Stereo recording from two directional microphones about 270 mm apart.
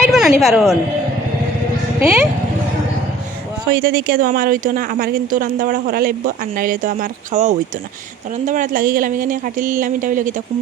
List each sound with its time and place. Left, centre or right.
0.1 s a woman's voice: centre
3.7 s speech: right